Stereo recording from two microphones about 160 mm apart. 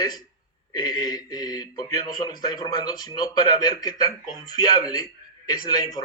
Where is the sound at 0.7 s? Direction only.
25° left (ahead or behind).